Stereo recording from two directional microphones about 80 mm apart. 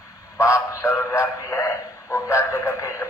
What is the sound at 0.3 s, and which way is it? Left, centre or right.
A man's voice, left.